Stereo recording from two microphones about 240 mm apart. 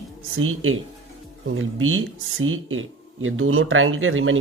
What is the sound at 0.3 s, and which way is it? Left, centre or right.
Speech, right.